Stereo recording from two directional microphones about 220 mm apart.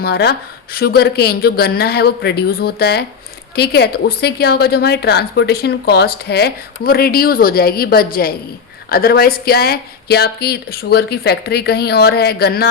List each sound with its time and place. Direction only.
0.0 s a woman's voice: 45° left (ahead or behind)